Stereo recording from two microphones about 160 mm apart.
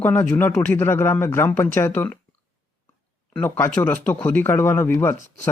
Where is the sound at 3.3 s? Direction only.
15° left (ahead or behind).